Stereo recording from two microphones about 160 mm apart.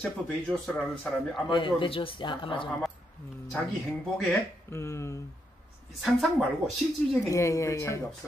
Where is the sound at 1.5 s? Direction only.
30° left (ahead or behind).